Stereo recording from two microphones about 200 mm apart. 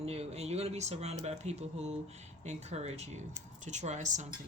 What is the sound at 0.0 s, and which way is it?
Speech, 30° right (ahead or behind).